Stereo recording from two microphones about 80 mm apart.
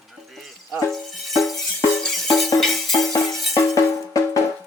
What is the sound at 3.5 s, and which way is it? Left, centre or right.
Music, left.